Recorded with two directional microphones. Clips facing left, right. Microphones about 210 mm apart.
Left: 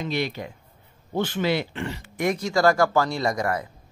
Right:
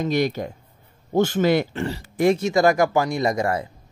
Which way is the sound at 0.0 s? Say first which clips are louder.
Right 6 dB; 45° right (ahead or behind).